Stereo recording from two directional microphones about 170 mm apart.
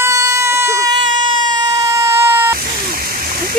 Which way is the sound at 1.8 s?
20° right (ahead or behind).